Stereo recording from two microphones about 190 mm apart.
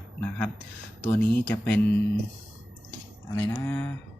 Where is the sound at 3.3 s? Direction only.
15° left (ahead or behind).